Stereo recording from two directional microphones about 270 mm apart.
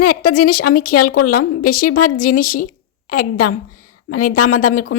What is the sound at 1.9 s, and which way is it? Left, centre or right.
Speech, left.